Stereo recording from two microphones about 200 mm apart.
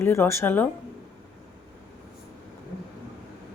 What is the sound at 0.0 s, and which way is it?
Speech, 10° left (ahead or behind).